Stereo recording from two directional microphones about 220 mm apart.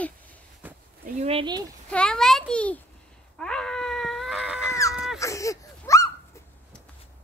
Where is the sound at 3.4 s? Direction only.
5° left (ahead or behind).